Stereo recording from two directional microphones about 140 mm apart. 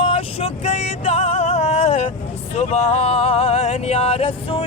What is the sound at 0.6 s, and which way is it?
Vehicle, 50° left (ahead or behind).